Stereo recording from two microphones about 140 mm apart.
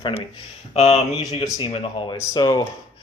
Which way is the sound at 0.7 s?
50° left (ahead or behind).